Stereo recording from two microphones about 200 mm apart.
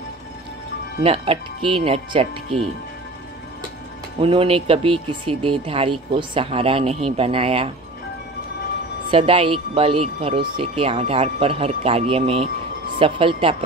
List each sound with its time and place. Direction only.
1.0 s speech: 30° right (ahead or behind)
4.2 s speech: 30° right (ahead or behind)
9.1 s speech: 25° right (ahead or behind)